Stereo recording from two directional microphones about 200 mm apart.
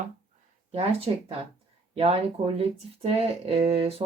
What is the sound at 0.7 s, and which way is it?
Speech, 30° right (ahead or behind).